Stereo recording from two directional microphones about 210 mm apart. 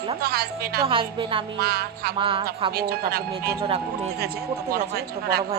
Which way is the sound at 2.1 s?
25° right (ahead or behind).